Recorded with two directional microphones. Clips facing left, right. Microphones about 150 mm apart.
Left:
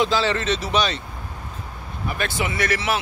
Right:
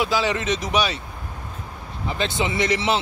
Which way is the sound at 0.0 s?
10° right (ahead or behind).